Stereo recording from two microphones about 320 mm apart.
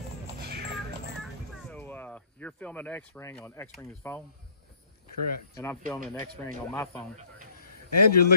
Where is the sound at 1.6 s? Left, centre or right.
Centre.